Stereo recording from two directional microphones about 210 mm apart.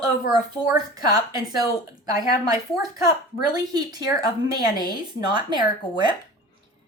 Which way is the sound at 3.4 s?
20° right (ahead or behind).